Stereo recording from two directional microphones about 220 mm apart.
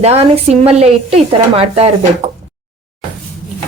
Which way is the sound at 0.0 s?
25° right (ahead or behind).